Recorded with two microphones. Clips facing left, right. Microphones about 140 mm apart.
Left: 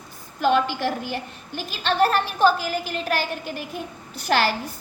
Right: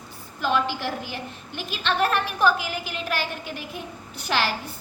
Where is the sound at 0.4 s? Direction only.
50° left (ahead or behind).